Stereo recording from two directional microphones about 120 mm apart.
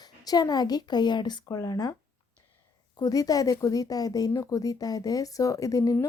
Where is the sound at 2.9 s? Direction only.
30° left (ahead or behind).